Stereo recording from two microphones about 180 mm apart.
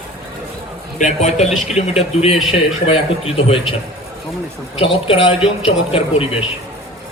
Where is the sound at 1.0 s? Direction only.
40° left (ahead or behind).